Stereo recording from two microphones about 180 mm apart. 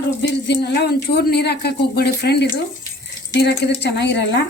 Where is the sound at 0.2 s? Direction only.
70° left (ahead or behind).